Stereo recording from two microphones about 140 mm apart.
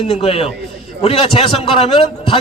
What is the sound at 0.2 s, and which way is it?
A man's voice, 45° left (ahead or behind).